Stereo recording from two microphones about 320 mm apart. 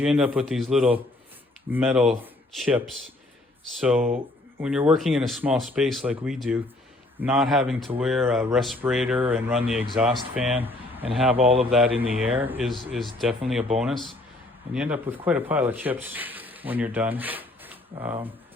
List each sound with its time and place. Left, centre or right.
0.0 s speech: centre
11.3 s speech: centre
11.7 s speech: centre